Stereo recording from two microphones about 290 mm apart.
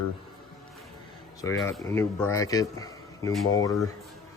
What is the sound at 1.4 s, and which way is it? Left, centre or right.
A man's voice, centre.